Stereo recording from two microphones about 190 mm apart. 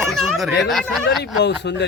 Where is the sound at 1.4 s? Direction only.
65° left (ahead or behind).